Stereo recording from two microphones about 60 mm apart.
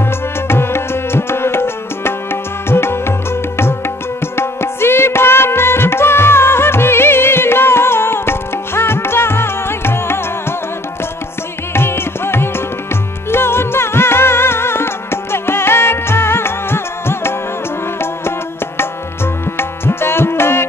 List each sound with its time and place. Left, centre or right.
0.5 s music: left
11.7 s music: left
19.5 s music: left